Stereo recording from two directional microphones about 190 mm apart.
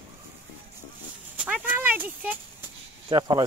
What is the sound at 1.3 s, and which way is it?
Speech, 10° right (ahead or behind).